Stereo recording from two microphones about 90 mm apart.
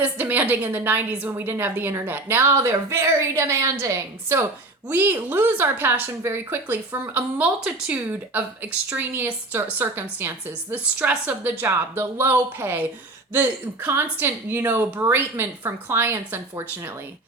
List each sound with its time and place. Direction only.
0.0 s a woman's voice: 20° right (ahead or behind)
11.6 s a woman's voice: 25° right (ahead or behind)